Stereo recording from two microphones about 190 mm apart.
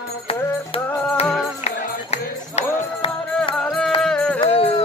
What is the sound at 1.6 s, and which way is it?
Music, 35° left (ahead or behind).